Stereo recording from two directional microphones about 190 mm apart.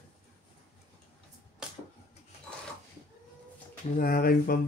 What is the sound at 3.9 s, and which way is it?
Speech, 50° left (ahead or behind).